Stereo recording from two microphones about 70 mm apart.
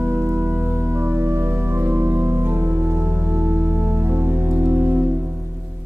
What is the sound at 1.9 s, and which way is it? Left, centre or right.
Music, right.